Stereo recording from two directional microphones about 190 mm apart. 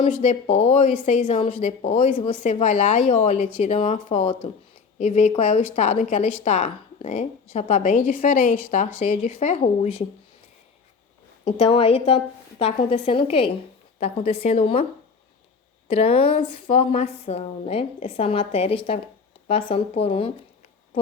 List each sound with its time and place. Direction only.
0.0 s speech: 35° left (ahead or behind)
11.4 s speech: 30° left (ahead or behind)
15.9 s speech: 30° left (ahead or behind)